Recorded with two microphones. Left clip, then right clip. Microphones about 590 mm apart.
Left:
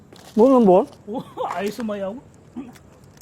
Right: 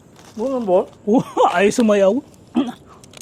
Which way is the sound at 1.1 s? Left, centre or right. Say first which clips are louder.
Right 12 dB; right.